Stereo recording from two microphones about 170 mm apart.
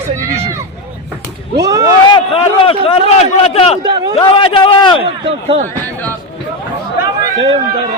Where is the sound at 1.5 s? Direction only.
20° right (ahead or behind).